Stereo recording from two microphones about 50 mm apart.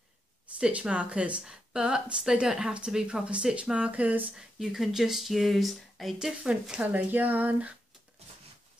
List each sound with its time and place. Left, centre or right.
0.6 s a woman's voice: centre
4.4 s speech: centre
6.1 s a woman's voice: centre
7.1 s speech: right